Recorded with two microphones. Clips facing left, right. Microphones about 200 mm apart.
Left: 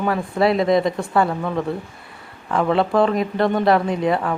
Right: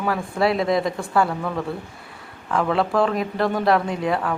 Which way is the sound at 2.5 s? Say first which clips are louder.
Left 3 dB; centre (ahead or behind).